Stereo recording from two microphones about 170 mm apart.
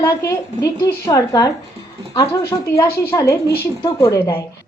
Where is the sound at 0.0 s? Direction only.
15° left (ahead or behind).